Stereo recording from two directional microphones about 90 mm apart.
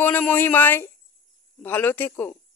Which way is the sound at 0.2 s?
20° left (ahead or behind).